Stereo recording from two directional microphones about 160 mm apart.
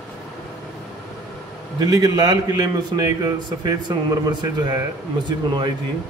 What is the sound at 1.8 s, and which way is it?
A man's voice, 20° right (ahead or behind).